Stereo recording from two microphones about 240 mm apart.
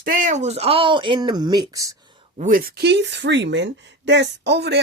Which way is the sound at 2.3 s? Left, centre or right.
Right.